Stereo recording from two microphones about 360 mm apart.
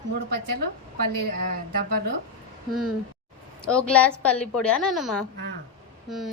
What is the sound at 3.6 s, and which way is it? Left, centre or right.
A woman's voice, centre.